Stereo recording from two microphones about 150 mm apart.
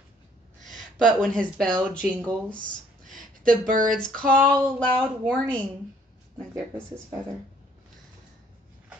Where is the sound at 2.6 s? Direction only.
60° right (ahead or behind).